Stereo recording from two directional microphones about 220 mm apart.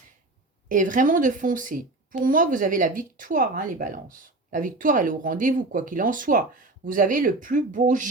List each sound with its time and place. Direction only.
0.7 s speech: 35° right (ahead or behind)